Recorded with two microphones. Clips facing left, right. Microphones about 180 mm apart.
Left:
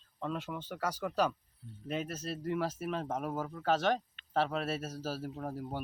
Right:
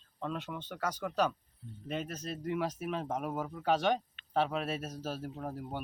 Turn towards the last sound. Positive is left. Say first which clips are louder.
# left 1 dB
turn(degrees=0)  # may be behind; listen again after turning